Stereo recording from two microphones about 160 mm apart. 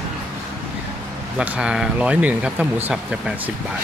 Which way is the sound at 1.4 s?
5° right (ahead or behind).